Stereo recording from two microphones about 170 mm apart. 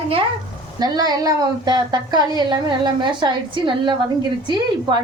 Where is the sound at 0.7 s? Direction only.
25° right (ahead or behind).